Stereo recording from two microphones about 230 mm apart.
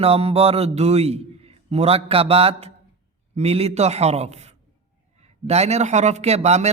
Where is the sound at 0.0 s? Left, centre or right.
Right.